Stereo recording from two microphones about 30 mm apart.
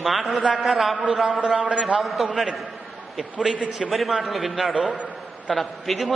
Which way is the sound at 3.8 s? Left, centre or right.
Centre.